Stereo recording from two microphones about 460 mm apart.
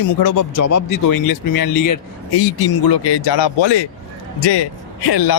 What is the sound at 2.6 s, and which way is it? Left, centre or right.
Speech, left.